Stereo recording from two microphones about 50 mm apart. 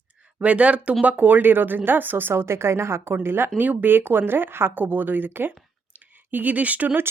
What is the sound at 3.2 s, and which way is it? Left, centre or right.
Speech, right.